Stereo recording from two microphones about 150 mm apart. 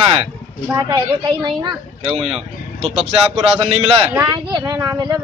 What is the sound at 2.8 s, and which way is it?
A man's voice, 40° right (ahead or behind).